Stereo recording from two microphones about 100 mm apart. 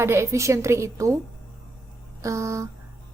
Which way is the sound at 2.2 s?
30° right (ahead or behind).